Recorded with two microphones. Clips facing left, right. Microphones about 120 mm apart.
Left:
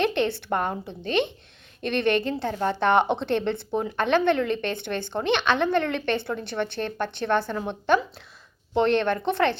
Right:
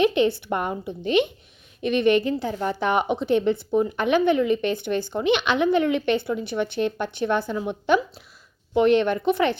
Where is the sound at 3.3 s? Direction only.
65° left (ahead or behind).